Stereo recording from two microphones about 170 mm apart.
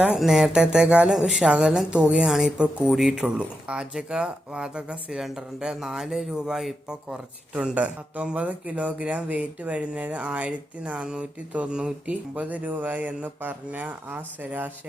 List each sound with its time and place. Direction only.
0.0 s speech: 5° right (ahead or behind)